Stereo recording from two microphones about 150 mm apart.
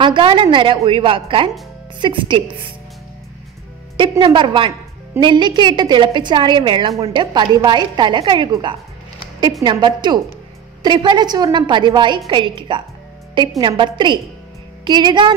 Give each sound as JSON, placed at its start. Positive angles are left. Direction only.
{"t": 0.0, "sound": "a woman's voice", "side_deg": -35}
{"t": 4.2, "sound": "a woman's voice", "side_deg": -35}